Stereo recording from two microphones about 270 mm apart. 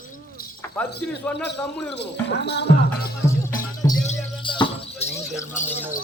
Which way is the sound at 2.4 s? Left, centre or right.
Left.